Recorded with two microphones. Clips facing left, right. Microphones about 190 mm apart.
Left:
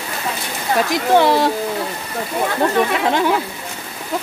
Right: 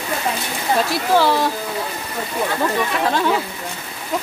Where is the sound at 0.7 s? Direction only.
15° left (ahead or behind).